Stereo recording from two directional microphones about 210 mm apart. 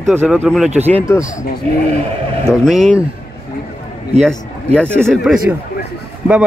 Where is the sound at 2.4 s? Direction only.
Centre (ahead or behind).